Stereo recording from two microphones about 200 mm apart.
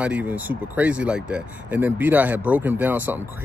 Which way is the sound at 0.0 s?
5° right (ahead or behind).